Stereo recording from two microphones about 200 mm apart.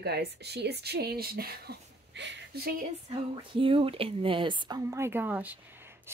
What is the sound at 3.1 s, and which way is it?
Speech, 25° right (ahead or behind).